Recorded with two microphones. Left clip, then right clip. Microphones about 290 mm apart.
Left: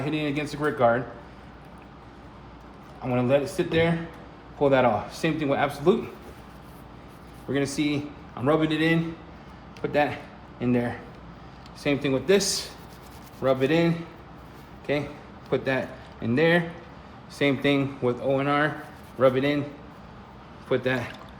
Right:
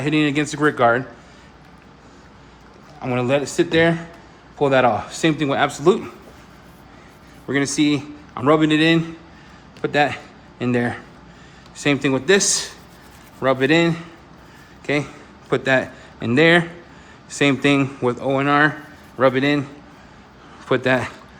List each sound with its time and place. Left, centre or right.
0.0 s a man's voice: right
3.0 s a man's voice: right
7.5 s a man's voice: right
13.4 s a man's voice: right
20.7 s a man's voice: right